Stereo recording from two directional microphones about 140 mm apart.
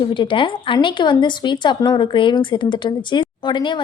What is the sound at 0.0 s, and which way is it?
A woman's voice, 35° left (ahead or behind).